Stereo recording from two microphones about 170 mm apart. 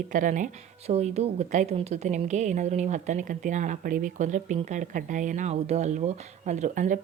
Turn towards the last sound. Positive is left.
turn(degrees=-50)  # may be behind; listen again after turning